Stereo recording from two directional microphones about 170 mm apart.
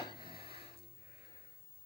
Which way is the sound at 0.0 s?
30° left (ahead or behind).